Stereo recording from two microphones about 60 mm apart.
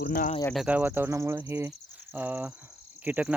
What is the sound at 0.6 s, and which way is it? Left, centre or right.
Speech, right.